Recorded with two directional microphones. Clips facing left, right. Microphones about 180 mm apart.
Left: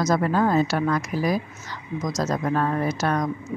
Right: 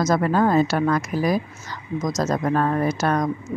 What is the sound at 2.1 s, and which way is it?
Speech, 50° right (ahead or behind).